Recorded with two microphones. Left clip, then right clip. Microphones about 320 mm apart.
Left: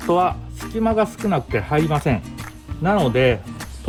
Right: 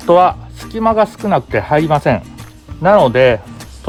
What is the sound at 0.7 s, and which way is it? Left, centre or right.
Speech, right.